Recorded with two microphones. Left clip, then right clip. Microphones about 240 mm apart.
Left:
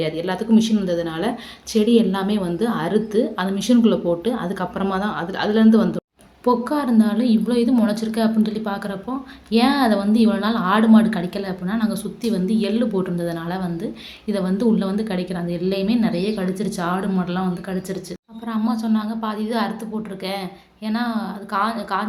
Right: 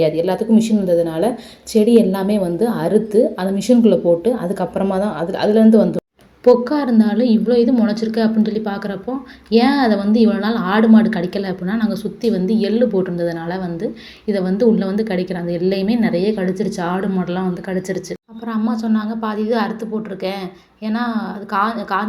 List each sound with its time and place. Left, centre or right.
0.5 s a woman's voice: centre